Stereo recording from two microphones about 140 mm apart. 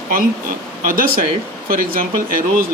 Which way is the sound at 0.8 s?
80° right.